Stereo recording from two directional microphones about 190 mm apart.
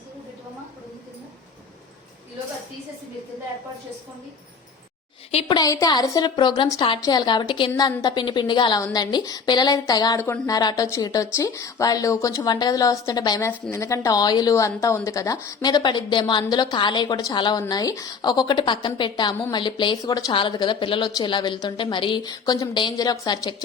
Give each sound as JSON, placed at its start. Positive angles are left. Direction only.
{"t": 5.3, "sound": "a woman's voice", "side_deg": 30}